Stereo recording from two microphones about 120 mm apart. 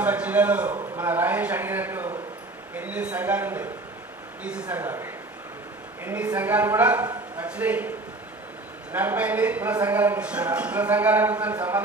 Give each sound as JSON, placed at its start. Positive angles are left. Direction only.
{"t": 0.0, "sound": "a sound", "side_deg": -10}
{"t": 0.7, "sound": "speech", "side_deg": -15}
{"t": 8.9, "sound": "speech", "side_deg": -15}